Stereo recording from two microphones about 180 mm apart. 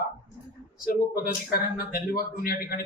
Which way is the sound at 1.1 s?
55° left (ahead or behind).